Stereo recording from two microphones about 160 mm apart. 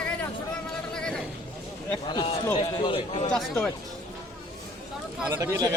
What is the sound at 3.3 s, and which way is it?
Speech, 5° left (ahead or behind).